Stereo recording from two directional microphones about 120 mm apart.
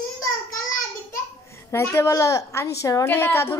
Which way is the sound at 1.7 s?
20° left (ahead or behind).